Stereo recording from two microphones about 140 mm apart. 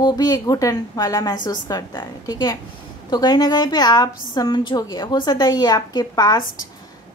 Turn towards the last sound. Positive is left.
turn(degrees=30)  # may be behind; listen again after turning